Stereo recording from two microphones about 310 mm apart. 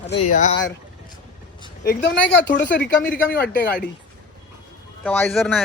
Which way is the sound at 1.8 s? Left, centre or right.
Left.